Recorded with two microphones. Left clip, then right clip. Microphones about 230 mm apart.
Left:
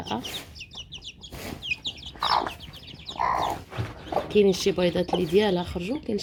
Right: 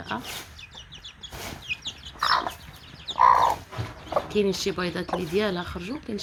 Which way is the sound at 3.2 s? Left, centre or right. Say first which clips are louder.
Right 8 dB; centre.